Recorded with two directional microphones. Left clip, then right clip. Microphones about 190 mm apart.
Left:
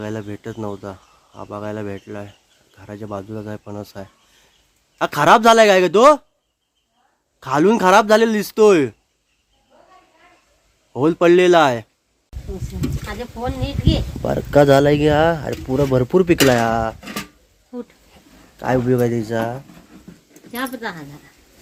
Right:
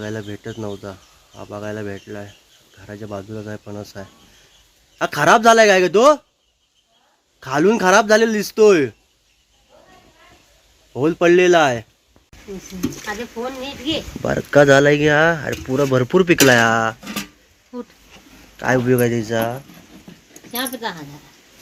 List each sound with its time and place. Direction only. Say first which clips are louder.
0.0 s speech: even; centre (ahead or behind)
7.3 s speech: left 1 dB; 5° left (ahead or behind)
10.9 s speech: left 1 dB; 5° left (ahead or behind)
14.3 s speech: right 1 dB; 10° left (ahead or behind)
17.7 s speech: even; 30° left (ahead or behind)
18.1 s speech: right 3 dB; 10° left (ahead or behind)
20.5 s speech: right 1 dB; 20° left (ahead or behind)